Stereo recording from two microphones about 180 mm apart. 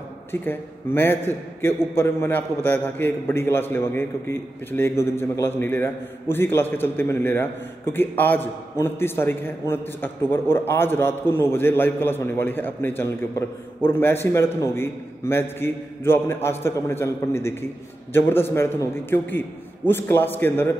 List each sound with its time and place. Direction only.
0.3 s a man's voice: 10° left (ahead or behind)